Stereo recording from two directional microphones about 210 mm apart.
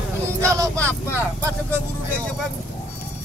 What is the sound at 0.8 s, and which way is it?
Speech, 5° left (ahead or behind).